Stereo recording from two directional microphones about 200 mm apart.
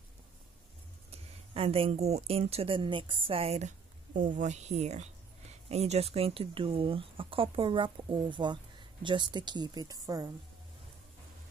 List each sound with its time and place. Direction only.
1.1 s speech: 30° right (ahead or behind)